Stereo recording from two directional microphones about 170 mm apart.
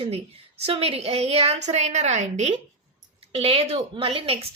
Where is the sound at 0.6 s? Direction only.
35° right (ahead or behind).